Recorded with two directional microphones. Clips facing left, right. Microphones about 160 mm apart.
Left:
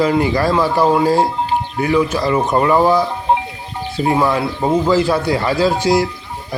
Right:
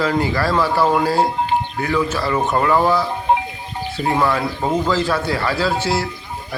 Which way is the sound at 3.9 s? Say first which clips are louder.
Left 3 dB; 15° left (ahead or behind).